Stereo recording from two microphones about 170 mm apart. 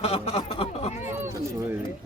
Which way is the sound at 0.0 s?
35° left (ahead or behind).